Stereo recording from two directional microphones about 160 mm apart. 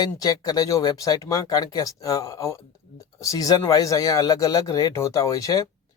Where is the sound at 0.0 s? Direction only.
25° left (ahead or behind).